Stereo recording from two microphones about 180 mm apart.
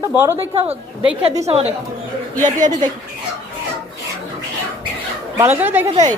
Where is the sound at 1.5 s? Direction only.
35° right (ahead or behind).